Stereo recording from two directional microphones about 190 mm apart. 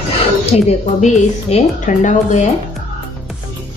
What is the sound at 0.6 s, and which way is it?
A woman's voice, 35° left (ahead or behind).